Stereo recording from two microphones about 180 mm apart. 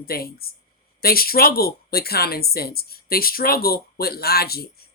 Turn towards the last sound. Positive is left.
turn(degrees=60)  # may be behind; listen again after turning